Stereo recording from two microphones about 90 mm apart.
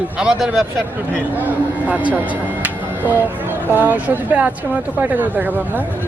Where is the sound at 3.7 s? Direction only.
20° right (ahead or behind).